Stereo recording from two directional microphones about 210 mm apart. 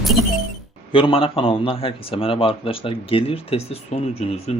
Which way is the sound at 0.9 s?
25° left (ahead or behind).